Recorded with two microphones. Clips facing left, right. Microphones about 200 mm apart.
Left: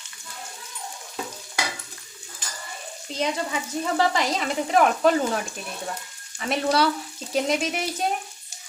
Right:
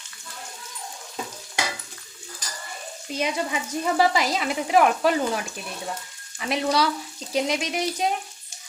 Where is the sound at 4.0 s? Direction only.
5° right (ahead or behind).